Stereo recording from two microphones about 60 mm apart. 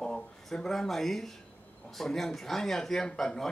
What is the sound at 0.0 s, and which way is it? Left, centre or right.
A man's voice, centre.